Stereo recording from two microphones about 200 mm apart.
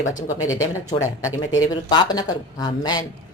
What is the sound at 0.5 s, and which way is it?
Speech, 15° left (ahead or behind).